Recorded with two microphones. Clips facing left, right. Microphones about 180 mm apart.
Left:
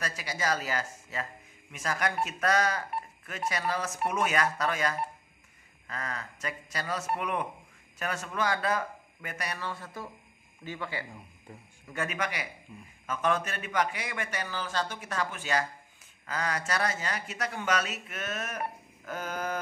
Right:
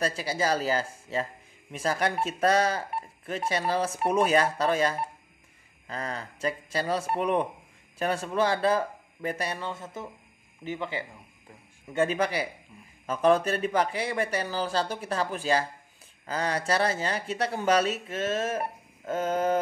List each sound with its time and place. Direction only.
0.0 s speech: 30° right (ahead or behind)